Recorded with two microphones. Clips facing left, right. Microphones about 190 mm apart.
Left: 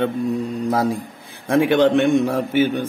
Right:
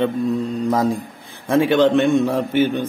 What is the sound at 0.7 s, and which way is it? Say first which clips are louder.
A man's voice: right 1 dB; 10° left (ahead or behind).